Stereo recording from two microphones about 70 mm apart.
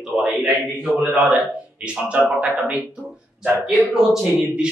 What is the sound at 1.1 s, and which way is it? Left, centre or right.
A man's voice, centre.